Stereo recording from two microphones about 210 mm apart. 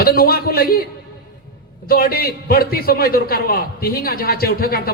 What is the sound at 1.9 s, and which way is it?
A man's voice, 45° left (ahead or behind).